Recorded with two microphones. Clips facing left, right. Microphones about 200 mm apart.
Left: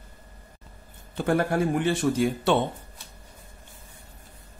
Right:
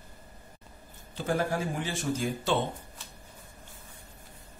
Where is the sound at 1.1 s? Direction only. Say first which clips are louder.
Left 5 dB; 60° left (ahead or behind).